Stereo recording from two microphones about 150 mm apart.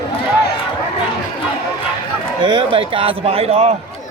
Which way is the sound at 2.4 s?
35° right (ahead or behind).